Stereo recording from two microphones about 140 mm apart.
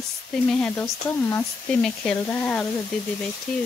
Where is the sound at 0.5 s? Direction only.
5° left (ahead or behind).